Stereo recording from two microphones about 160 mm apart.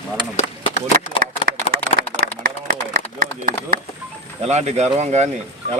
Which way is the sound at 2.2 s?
35° left (ahead or behind).